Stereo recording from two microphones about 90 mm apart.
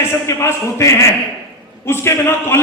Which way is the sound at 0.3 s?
35° left (ahead or behind).